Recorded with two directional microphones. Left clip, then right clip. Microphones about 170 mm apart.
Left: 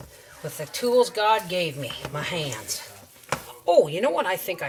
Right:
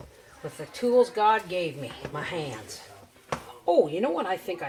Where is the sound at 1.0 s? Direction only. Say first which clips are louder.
Left 1 dB; 15° right (ahead or behind).